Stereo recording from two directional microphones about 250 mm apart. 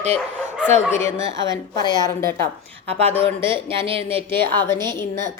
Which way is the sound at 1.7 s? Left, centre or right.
Centre.